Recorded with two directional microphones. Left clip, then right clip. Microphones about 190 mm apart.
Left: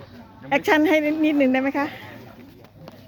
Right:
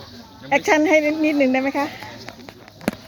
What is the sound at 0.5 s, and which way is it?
Speech, 10° left (ahead or behind).